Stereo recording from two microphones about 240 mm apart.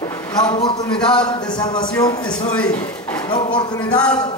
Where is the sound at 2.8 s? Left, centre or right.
Centre.